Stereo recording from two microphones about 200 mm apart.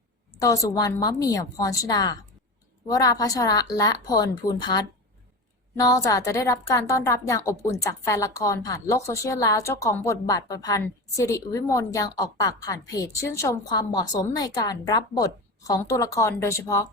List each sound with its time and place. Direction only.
0.3 s a woman's voice: 15° left (ahead or behind)